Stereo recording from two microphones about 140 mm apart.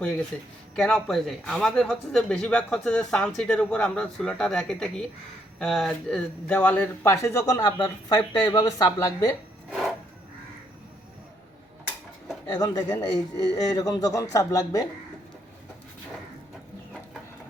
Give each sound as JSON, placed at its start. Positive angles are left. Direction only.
{"t": 0.3, "sound": "speech", "side_deg": 10}
{"t": 8.5, "sound": "a man's voice", "side_deg": 25}
{"t": 9.6, "sound": "a sound", "side_deg": -5}
{"t": 12.5, "sound": "a man's voice", "side_deg": 30}